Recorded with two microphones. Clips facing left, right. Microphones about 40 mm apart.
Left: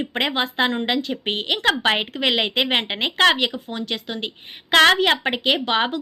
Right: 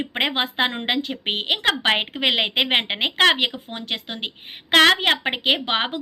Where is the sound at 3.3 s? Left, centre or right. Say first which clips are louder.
Left 1 dB; right.